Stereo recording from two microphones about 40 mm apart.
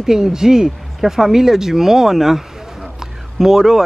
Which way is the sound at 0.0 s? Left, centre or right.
Centre.